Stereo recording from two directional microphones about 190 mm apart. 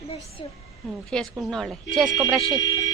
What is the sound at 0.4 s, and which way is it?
Speech, 25° left (ahead or behind).